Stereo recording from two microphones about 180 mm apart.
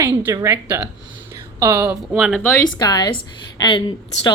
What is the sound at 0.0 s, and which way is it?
Speech, 15° right (ahead or behind).